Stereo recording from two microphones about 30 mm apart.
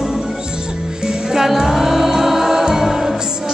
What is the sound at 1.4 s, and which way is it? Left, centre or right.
Music, centre.